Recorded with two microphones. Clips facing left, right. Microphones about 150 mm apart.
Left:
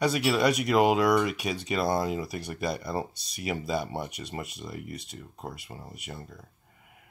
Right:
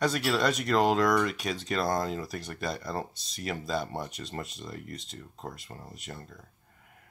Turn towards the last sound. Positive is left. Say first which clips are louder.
# left 1 dB
turn(degrees=10)  # may be behind; listen again after turning